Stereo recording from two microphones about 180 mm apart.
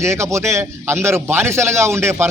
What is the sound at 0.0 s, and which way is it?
A man's voice, 15° right (ahead or behind).